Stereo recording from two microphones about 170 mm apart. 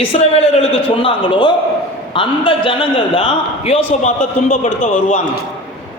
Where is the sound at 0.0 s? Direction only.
40° left (ahead or behind).